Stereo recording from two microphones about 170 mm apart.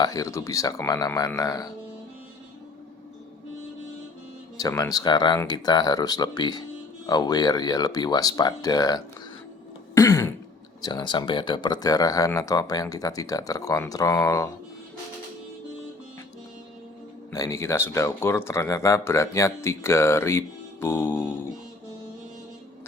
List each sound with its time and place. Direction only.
0.0 s speech: 20° left (ahead or behind)
4.5 s speech: 20° left (ahead or behind)
9.9 s throat clearing: 20° left (ahead or behind)
10.8 s speech: 25° left (ahead or behind)
17.3 s speech: 20° left (ahead or behind)